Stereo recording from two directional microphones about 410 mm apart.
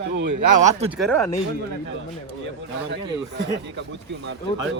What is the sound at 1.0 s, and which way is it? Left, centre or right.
Speech, centre.